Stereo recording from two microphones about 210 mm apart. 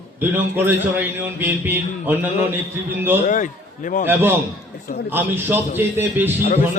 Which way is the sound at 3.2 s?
40° left (ahead or behind).